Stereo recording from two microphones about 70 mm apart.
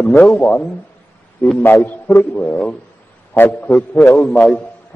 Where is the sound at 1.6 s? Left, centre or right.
Left.